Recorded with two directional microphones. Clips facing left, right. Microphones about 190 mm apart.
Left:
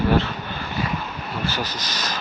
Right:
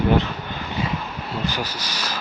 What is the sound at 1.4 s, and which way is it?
Speech, 10° right (ahead or behind).